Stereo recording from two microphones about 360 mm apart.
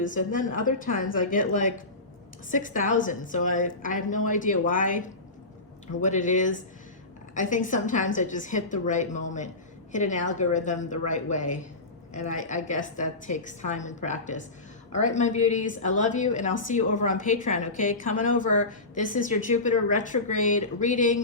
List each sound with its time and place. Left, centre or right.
0.0 s a woman's voice: left